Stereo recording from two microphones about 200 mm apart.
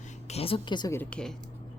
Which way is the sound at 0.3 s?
30° left (ahead or behind).